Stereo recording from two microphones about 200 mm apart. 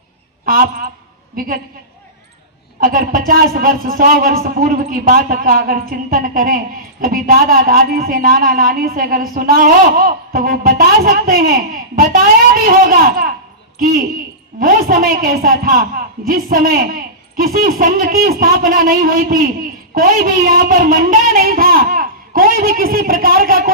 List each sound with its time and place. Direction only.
0.4 s a woman's voice: 45° right (ahead or behind)
2.8 s a woman's voice: 45° right (ahead or behind)